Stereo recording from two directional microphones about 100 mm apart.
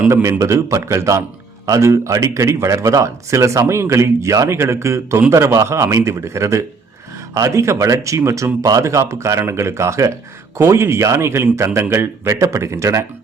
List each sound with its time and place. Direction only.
0.1 s a man's voice: 30° right (ahead or behind)